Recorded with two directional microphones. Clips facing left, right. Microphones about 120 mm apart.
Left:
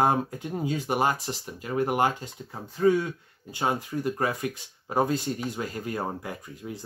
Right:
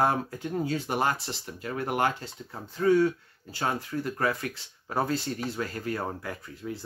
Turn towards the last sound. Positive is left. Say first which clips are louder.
# right 1 dB
turn(degrees=15)  # may be behind; listen again after turning